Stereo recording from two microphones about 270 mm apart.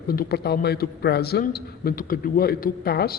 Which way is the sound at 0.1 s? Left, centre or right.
Left.